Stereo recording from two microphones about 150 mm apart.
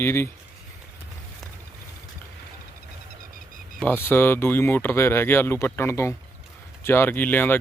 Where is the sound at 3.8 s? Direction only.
15° left (ahead or behind).